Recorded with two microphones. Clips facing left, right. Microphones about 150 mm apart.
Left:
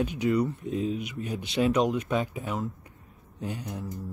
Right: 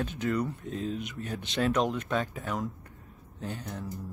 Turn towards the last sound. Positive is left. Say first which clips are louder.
# left 2 dB
turn(degrees=10)  # may be behind; listen again after turning